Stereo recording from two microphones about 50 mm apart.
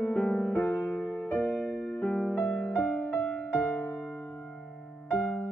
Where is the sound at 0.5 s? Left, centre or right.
Left.